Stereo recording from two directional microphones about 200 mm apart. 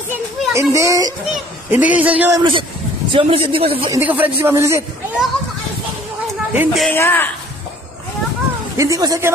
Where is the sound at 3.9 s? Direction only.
10° right (ahead or behind).